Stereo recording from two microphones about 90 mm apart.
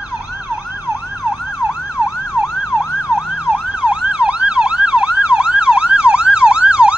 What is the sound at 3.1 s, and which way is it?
Emergency vehicle, 10° right (ahead or behind).